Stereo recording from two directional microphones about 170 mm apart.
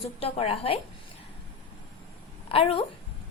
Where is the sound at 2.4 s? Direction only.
35° left (ahead or behind).